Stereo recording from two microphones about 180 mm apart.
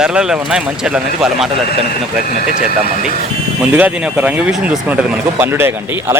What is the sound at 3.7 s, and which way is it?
Speech, 10° right (ahead or behind).